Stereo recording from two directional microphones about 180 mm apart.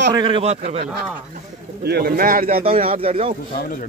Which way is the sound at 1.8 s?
60° right (ahead or behind).